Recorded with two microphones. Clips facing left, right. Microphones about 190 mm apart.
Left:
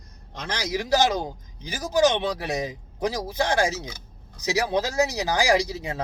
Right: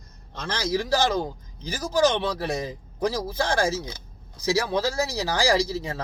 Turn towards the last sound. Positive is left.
turn(degrees=15)  # may be behind; listen again after turning